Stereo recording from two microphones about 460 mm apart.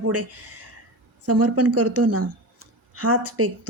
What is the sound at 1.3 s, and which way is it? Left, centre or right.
A woman's voice, right.